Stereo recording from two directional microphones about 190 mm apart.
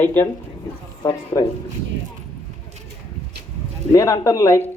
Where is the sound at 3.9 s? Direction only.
15° left (ahead or behind).